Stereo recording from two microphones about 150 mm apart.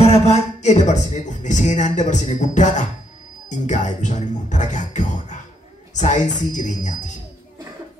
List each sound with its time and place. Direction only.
0.0 s music: 45° left (ahead or behind)